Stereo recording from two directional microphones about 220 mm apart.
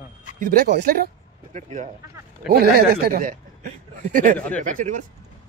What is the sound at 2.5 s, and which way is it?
A man's voice, 45° right (ahead or behind).